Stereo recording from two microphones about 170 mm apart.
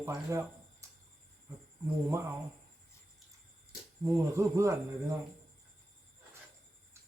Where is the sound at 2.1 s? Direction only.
15° right (ahead or behind).